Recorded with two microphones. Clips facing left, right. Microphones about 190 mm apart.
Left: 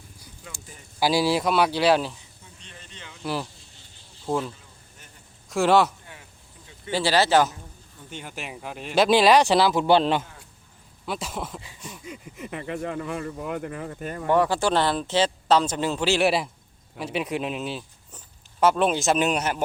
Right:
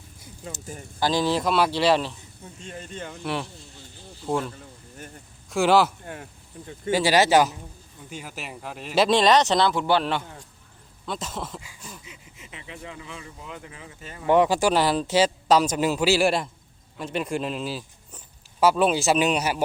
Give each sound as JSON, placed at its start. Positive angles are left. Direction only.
{"t": 0.2, "sound": "bird", "side_deg": -25}
{"t": 0.9, "sound": "speech", "side_deg": 10}
{"t": 2.6, "sound": "speech", "side_deg": -45}
{"t": 4.5, "sound": "a sound", "side_deg": -50}
{"t": 5.5, "sound": "speech", "side_deg": 0}
{"t": 6.9, "sound": "speech", "side_deg": -15}
{"t": 8.1, "sound": "speech", "side_deg": -5}
{"t": 9.8, "sound": "a man's voice", "side_deg": 20}
{"t": 11.0, "sound": "speech", "side_deg": 5}
{"t": 12.0, "sound": "speech", "side_deg": 50}
{"t": 14.3, "sound": "speech", "side_deg": -15}